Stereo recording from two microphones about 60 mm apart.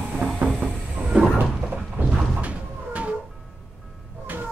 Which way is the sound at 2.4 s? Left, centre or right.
Right.